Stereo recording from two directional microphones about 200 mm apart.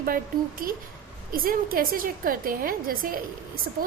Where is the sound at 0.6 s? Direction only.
45° right (ahead or behind).